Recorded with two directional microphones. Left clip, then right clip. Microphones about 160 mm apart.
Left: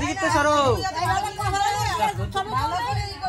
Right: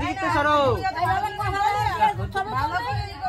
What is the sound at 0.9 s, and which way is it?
Music, centre (ahead or behind).